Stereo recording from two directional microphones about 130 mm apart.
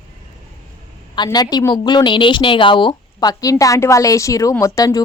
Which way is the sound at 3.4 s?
25° left (ahead or behind).